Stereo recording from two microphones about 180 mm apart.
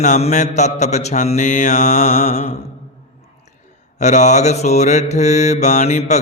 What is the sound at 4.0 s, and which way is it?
Speech, 40° left (ahead or behind).